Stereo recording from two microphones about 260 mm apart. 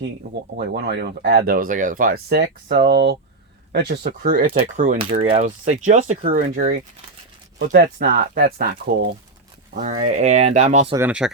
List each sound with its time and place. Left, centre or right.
0.5 s speech: right
9.7 s speech: right
10.9 s speech: centre